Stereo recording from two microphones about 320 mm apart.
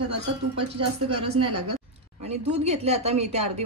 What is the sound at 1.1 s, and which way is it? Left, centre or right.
Speech, centre.